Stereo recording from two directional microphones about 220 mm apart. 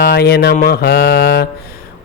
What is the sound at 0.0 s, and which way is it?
Speech, 45° left (ahead or behind).